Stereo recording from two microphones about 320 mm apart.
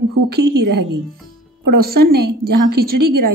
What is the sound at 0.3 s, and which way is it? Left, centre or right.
A woman's voice, right.